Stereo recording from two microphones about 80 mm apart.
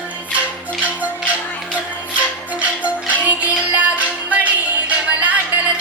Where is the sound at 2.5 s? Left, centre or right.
Centre.